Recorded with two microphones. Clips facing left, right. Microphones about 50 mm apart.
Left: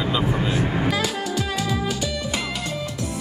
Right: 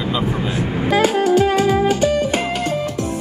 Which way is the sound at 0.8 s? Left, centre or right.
Right.